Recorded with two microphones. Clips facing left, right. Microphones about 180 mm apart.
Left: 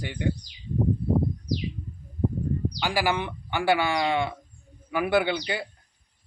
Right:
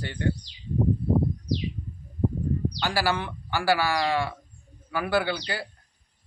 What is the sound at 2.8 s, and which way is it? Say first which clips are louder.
Speech: left 2 dB; 15° left (ahead or behind).